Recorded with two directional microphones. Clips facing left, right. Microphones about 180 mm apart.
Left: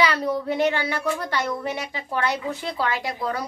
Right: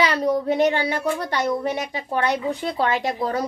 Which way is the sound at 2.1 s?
20° right (ahead or behind).